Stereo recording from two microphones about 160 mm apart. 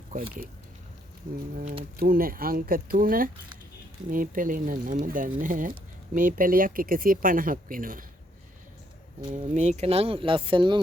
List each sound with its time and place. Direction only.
0.1 s speech: 55° right (ahead or behind)
2.0 s speech: 65° right (ahead or behind)
9.3 s speech: 45° right (ahead or behind); by 10.8 s 30° right (ahead or behind)